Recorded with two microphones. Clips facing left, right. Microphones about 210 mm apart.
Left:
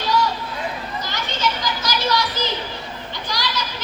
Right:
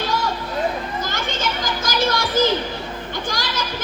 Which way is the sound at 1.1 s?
50° right (ahead or behind).